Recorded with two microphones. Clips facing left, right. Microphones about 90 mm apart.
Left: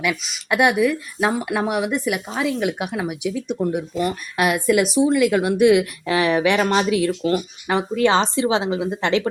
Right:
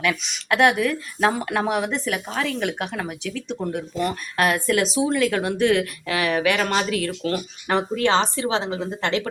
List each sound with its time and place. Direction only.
0.0 s speech: 5° left (ahead or behind)
6.1 s speech: 25° left (ahead or behind)